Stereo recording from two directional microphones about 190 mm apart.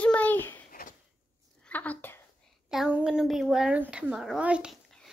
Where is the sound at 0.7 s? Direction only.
50° left (ahead or behind).